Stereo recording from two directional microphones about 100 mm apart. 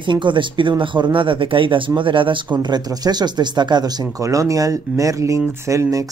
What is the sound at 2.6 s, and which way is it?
Speech, 45° right (ahead or behind).